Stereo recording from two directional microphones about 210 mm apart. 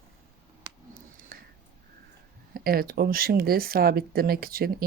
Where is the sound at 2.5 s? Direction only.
45° right (ahead or behind).